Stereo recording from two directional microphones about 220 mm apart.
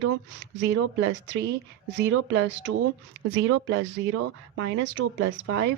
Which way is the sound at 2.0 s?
55° right (ahead or behind).